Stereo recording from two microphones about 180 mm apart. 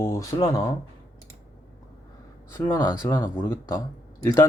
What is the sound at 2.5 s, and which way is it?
Speech, 15° left (ahead or behind).